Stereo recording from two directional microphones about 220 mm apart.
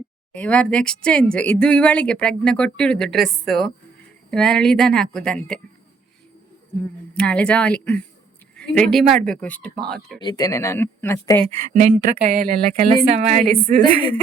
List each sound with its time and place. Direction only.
0.3 s speech: 5° left (ahead or behind)
7.1 s speech: 5° left (ahead or behind)
10.2 s speech: 20° left (ahead or behind)
11.7 s speech: 35° right (ahead or behind)
13.1 s speech: 30° right (ahead or behind)